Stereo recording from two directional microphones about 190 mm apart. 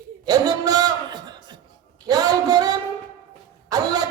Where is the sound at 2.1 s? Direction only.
20° right (ahead or behind).